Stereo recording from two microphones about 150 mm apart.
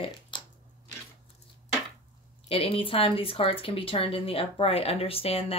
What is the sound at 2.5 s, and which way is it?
Speech, 35° left (ahead or behind).